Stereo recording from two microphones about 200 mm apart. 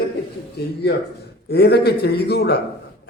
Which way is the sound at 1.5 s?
55° left (ahead or behind).